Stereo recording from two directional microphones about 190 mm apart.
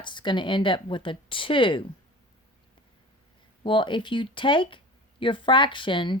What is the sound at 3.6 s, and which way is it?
Speech, 25° left (ahead or behind).